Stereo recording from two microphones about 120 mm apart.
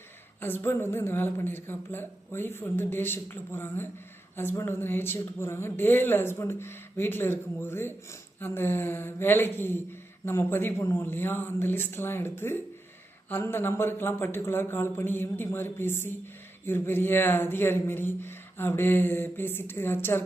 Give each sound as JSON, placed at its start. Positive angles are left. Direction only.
{"t": 0.3, "sound": "speech", "side_deg": 15}